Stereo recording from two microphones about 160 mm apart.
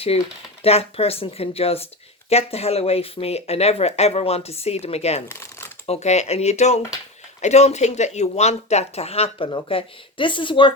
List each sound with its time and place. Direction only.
0.1 s speech: 40° left (ahead or behind)
5.3 s shuffling cards: 15° left (ahead or behind)
5.8 s speech: 40° left (ahead or behind)